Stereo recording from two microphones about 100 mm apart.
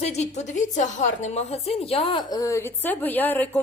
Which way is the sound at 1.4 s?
90° left.